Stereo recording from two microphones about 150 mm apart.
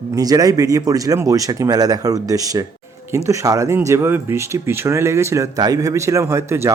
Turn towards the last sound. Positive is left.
turn(degrees=-15)  # may be behind; listen again after turning